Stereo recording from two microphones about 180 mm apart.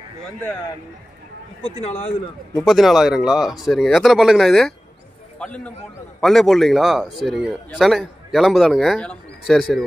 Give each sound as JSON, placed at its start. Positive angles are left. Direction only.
{"t": 1.6, "sound": "speech", "side_deg": 35}
{"t": 2.6, "sound": "a man's voice", "side_deg": 0}